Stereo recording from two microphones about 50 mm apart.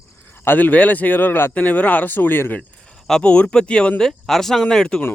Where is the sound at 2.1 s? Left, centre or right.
Left.